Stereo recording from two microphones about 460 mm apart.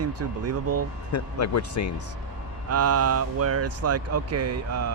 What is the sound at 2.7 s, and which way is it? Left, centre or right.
Speech, right.